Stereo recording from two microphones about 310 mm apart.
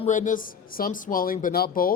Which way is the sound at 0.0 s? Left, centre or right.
Left.